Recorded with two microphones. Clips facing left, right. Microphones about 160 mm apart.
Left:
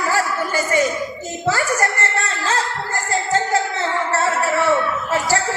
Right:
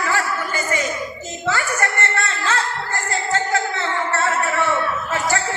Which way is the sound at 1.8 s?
35° left (ahead or behind).